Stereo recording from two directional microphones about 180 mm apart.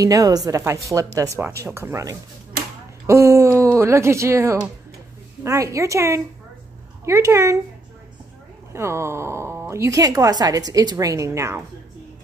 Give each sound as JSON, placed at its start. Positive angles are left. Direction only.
{"t": 0.0, "sound": "a woman's voice", "side_deg": -20}
{"t": 8.7, "sound": "speech", "side_deg": -15}